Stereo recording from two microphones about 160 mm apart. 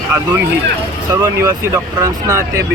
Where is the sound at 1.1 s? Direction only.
15° right (ahead or behind).